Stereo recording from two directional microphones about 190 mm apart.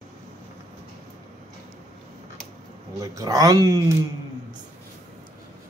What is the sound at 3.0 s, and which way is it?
Speech, 15° right (ahead or behind).